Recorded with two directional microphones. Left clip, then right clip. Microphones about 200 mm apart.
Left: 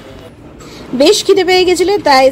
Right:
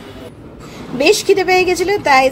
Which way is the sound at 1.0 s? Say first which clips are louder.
Left 3 dB; 35° left (ahead or behind).